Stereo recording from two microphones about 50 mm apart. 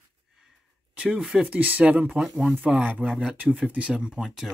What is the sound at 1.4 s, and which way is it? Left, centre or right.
Speech, right.